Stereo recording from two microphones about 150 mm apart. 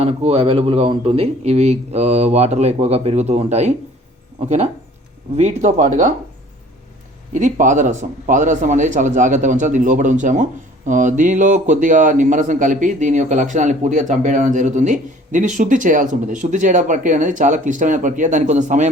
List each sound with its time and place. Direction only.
0.0 s speech: 40° right (ahead or behind)
7.3 s speech: 55° right (ahead or behind)